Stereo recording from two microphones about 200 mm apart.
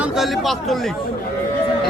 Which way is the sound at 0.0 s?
Centre (ahead or behind).